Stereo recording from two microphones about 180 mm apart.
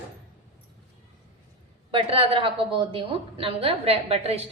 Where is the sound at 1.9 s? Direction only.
30° right (ahead or behind).